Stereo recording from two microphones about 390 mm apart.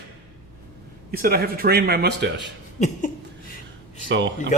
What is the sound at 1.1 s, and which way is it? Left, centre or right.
Speech, right.